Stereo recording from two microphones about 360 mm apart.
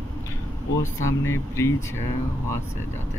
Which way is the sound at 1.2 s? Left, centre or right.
Centre.